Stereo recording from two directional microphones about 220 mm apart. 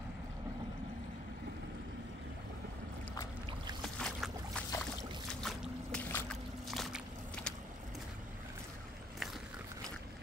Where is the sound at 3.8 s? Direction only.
Centre (ahead or behind).